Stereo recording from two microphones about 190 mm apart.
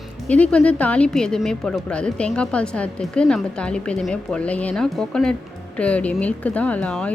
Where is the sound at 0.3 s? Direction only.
5° left (ahead or behind).